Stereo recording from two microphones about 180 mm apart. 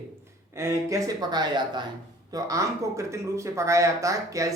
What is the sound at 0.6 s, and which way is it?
Speech, 15° right (ahead or behind).